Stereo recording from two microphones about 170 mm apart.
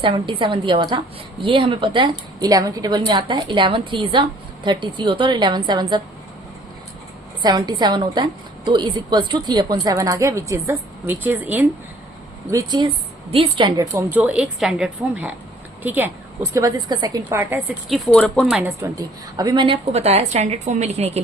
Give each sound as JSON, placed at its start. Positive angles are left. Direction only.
{"t": 0.0, "sound": "a woman's voice", "side_deg": -30}
{"t": 7.4, "sound": "a woman's voice", "side_deg": -25}
{"t": 12.5, "sound": "a woman's voice", "side_deg": -20}
{"t": 13.9, "sound": "a woman's voice", "side_deg": -10}
{"t": 17.8, "sound": "speech", "side_deg": 5}
{"t": 18.4, "sound": "speech", "side_deg": -5}
{"t": 18.8, "sound": "a woman's voice", "side_deg": -20}